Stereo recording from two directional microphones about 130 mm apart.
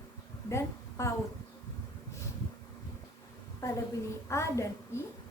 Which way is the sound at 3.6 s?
20° left (ahead or behind).